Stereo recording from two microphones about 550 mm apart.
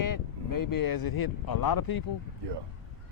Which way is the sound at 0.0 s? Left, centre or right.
Left.